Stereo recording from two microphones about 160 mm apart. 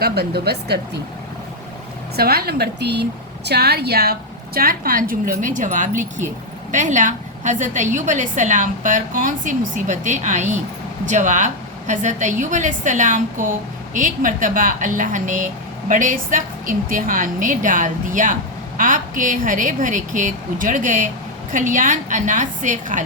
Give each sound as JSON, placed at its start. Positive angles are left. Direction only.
{"t": 0.0, "sound": "speech", "side_deg": -85}
{"t": 2.1, "sound": "a woman's voice", "side_deg": -75}